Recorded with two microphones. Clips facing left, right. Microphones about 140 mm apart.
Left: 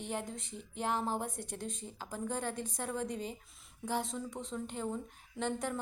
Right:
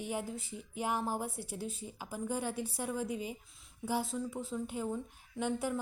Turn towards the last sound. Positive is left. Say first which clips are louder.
# right 2 dB
turn(degrees=-5)  # may be behind; listen again after turning